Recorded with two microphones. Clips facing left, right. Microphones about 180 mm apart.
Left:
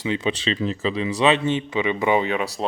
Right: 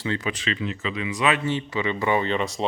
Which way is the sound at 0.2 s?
25° left (ahead or behind).